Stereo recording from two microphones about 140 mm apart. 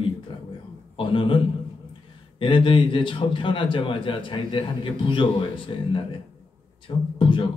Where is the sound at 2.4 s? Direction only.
35° left (ahead or behind).